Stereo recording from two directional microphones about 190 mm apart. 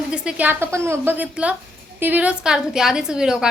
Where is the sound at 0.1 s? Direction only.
5° right (ahead or behind).